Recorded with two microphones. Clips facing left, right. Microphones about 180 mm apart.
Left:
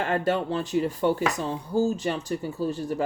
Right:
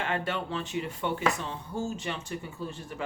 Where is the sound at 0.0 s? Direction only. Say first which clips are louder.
Left 7 dB; 40° left (ahead or behind).